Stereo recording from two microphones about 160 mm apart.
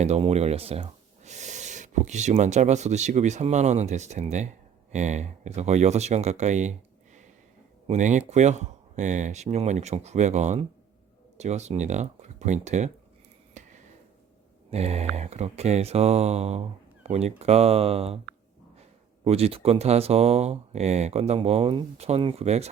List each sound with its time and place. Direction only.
0.0 s speech: 40° right (ahead or behind)
7.9 s speech: 50° right (ahead or behind)
13.5 s a sound: 50° right (ahead or behind)
14.7 s speech: 40° right (ahead or behind)